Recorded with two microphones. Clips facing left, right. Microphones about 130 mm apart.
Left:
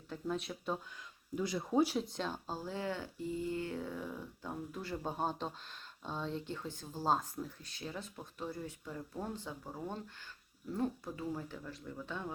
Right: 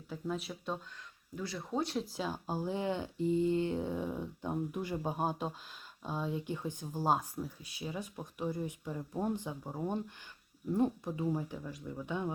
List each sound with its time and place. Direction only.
0.1 s speech: centre (ahead or behind)
1.4 s speech: 15° left (ahead or behind); by 12.3 s 15° right (ahead or behind)